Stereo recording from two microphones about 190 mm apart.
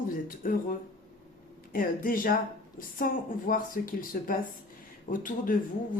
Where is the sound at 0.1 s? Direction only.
45° left (ahead or behind).